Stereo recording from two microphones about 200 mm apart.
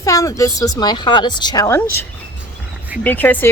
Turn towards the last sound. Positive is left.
turn(degrees=10)  # may be behind; listen again after turning